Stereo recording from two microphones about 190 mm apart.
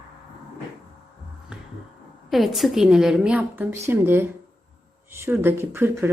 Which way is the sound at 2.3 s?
Centre (ahead or behind).